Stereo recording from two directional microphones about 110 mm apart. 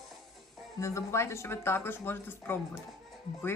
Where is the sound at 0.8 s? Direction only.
25° left (ahead or behind).